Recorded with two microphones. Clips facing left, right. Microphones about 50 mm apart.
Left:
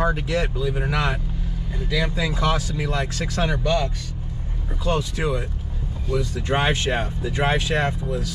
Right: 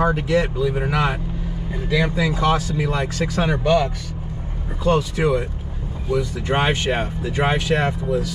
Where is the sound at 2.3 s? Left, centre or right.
Centre.